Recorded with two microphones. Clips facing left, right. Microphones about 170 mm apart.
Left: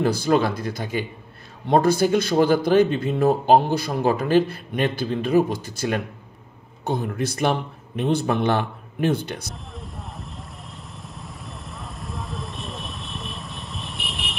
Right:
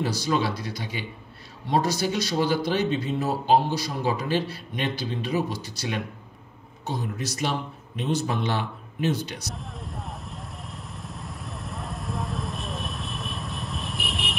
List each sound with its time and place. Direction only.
0.0 s speech: 55° left (ahead or behind)
9.8 s vehicle: centre (ahead or behind)